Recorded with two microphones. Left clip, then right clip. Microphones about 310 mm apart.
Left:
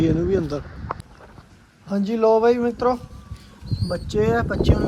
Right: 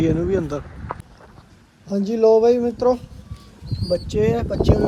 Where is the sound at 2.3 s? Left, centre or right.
Centre.